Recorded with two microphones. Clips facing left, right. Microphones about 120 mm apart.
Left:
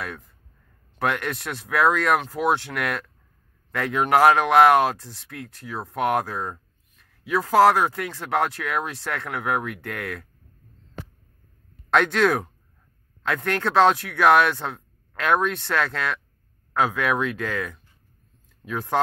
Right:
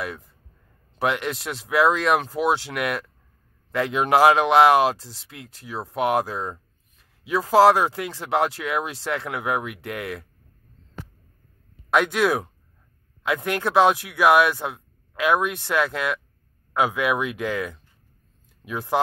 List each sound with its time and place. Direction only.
0.9 s speech: 10° right (ahead or behind)
11.9 s speech: 10° right (ahead or behind)